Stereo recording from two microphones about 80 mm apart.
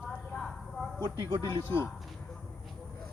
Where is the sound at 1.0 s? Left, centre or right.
Right.